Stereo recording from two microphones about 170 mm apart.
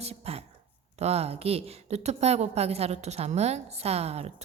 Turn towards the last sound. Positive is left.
turn(degrees=-40)  # may be behind; listen again after turning